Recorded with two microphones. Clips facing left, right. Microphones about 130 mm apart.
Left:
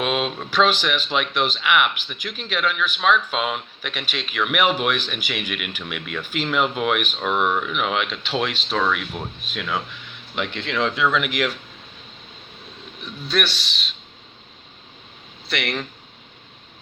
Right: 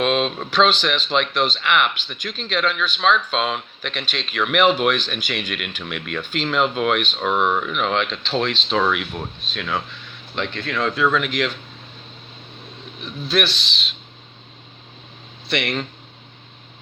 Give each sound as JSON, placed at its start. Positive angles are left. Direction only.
{"t": 0.0, "sound": "speech", "side_deg": 10}
{"t": 8.7, "sound": "speech", "side_deg": -5}
{"t": 9.4, "sound": "speech", "side_deg": 15}
{"t": 13.2, "sound": "speech", "side_deg": 0}
{"t": 15.4, "sound": "speech", "side_deg": 0}